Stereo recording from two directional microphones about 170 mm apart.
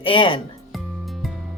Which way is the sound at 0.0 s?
30° left (ahead or behind).